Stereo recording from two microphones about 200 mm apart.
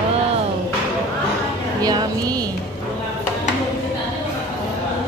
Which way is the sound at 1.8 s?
20° right (ahead or behind).